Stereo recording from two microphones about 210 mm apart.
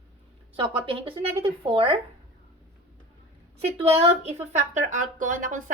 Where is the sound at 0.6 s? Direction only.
25° right (ahead or behind).